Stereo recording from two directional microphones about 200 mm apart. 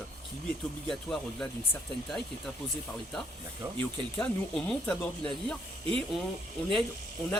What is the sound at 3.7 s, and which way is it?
Speech, 5° left (ahead or behind).